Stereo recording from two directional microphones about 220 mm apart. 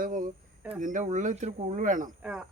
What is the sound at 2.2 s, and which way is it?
Speech, 5° right (ahead or behind).